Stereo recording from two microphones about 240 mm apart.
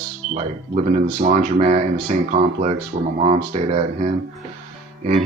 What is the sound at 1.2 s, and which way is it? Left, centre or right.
Speech, right.